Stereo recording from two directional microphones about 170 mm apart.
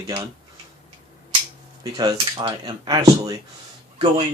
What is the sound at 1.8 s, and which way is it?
Speech, 20° right (ahead or behind).